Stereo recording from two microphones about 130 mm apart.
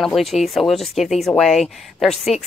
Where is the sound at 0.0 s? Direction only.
Centre (ahead or behind).